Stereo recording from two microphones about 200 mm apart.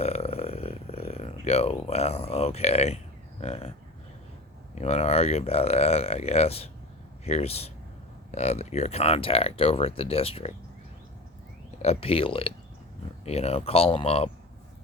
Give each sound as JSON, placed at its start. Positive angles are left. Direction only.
{"t": 0.0, "sound": "a sound", "side_deg": 30}
{"t": 3.4, "sound": "speech", "side_deg": 30}
{"t": 11.8, "sound": "speech", "side_deg": 30}